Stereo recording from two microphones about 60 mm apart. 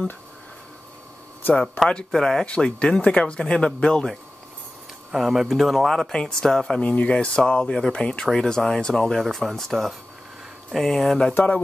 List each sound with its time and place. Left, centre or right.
1.5 s speech: centre
5.1 s speech: centre
6.8 s speech: left; by 11.1 s centre
11.3 s speech: left